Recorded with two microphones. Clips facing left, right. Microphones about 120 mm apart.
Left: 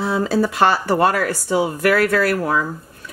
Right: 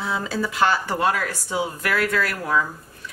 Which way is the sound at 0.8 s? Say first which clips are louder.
Left 6 dB; 60° left (ahead or behind).